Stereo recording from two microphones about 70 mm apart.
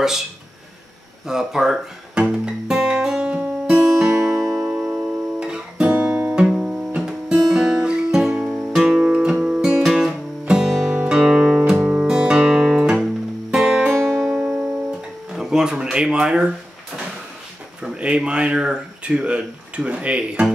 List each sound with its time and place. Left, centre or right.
1.2 s guitar: centre
3.8 s music: centre
4.3 s music: right
4.6 s guitar: centre
7.4 s music: centre
15.3 s a sound: centre
17.8 s speech: centre